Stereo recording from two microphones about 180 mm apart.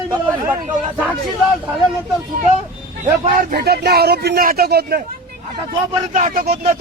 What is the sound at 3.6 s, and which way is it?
Speech, 60° right (ahead or behind).